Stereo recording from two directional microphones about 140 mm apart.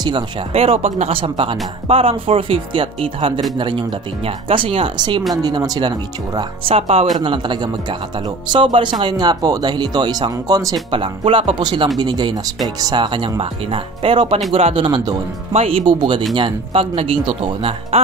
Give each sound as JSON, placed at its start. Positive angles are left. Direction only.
{"t": 0.5, "sound": "speech", "side_deg": -45}
{"t": 6.7, "sound": "speech", "side_deg": -45}
{"t": 7.2, "sound": "speech", "side_deg": -35}
{"t": 10.9, "sound": "speech", "side_deg": -40}